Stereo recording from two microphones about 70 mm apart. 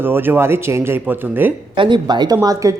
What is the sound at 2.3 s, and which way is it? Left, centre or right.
Speech, right.